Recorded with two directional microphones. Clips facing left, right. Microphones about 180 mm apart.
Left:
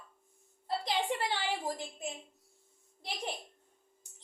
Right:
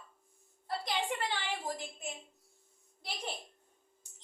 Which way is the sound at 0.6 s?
30° left (ahead or behind).